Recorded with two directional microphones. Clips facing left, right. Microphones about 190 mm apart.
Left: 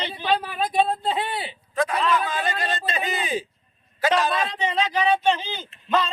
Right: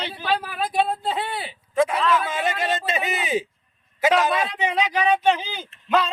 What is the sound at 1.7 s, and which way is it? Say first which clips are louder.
A man's voice: right 3 dB; 25° right (ahead or behind).